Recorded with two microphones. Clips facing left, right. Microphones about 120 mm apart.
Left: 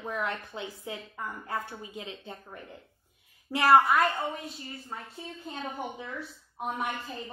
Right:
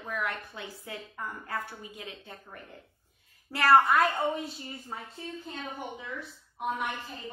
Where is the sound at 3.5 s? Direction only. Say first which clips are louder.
Left 1 dB; 15° left (ahead or behind).